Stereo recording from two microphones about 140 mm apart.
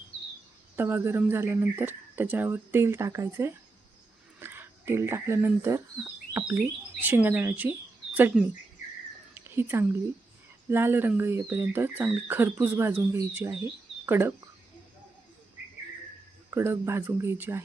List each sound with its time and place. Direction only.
0.8 s speech: 15° right (ahead or behind)
16.5 s speech: 20° right (ahead or behind)